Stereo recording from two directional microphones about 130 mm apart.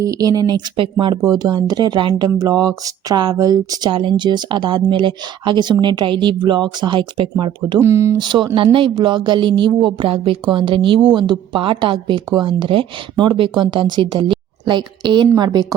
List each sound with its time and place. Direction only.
0.0 s speech: 25° right (ahead or behind)
7.8 s speech: 20° right (ahead or behind)
8.2 s speech: 35° right (ahead or behind)